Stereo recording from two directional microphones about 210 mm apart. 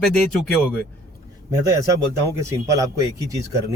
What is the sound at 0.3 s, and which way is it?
Speech, 5° left (ahead or behind).